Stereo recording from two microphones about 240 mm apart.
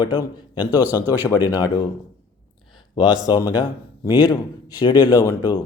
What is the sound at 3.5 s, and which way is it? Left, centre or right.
Speech, centre.